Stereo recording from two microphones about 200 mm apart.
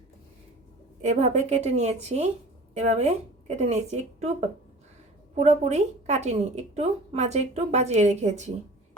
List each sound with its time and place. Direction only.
1.0 s a woman's voice: 35° right (ahead or behind)